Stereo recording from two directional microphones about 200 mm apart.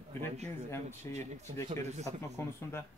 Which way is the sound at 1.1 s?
35° right (ahead or behind).